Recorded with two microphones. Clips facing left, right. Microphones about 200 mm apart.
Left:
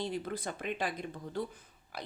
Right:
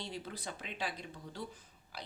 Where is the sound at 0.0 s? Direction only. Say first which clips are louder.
Left 7 dB; 50° left (ahead or behind).